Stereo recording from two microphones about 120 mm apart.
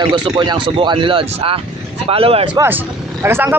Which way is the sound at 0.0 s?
45° right (ahead or behind).